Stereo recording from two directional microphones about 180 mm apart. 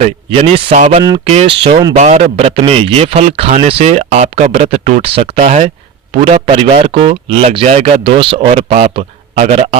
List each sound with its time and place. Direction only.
0.3 s a man's voice: 35° right (ahead or behind)
2.0 s a man's voice: 35° right (ahead or behind)